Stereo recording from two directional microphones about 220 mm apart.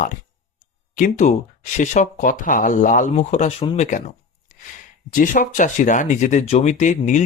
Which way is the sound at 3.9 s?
35° left (ahead or behind).